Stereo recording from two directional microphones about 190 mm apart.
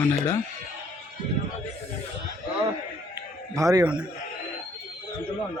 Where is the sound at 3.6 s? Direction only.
20° right (ahead or behind).